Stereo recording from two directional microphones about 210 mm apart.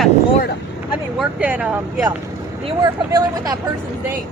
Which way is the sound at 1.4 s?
10° right (ahead or behind).